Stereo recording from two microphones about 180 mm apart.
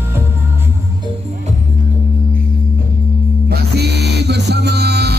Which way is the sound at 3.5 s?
65° right (ahead or behind).